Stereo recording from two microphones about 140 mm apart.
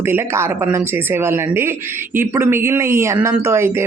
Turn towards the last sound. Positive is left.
turn(degrees=-15)  # may be behind; listen again after turning